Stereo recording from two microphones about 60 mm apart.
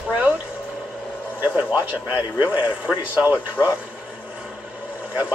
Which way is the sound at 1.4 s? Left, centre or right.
Right.